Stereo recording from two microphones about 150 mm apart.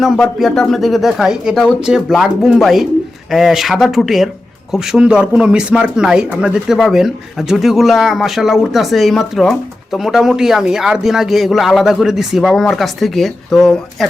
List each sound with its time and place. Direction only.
0.0 s a man's voice: centre (ahead or behind)